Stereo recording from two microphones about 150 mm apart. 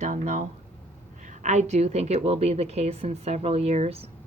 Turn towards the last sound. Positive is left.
turn(degrees=-45)  # may be behind; listen again after turning